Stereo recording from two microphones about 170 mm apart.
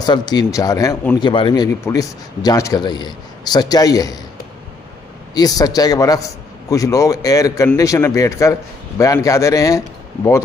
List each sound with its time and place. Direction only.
0.0 s speech: 25° left (ahead or behind)
5.3 s speech: 20° left (ahead or behind)